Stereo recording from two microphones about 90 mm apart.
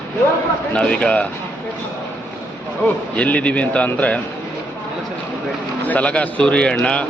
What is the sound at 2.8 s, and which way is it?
A man's voice, 15° left (ahead or behind).